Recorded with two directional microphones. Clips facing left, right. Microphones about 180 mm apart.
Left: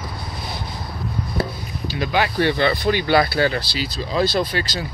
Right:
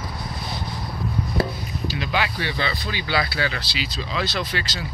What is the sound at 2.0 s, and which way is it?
Speech, 45° left (ahead or behind).